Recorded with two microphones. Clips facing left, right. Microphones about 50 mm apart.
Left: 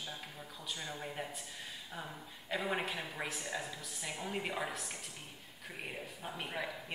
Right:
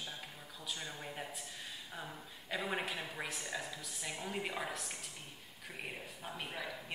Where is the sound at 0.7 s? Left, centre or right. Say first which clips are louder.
Left 1 dB; centre.